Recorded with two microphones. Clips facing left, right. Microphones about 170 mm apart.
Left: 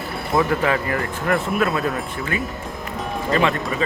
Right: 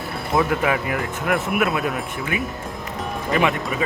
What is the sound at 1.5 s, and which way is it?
Speech, 20° right (ahead or behind).